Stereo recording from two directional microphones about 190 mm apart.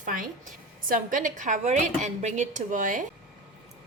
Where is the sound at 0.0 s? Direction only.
45° right (ahead or behind).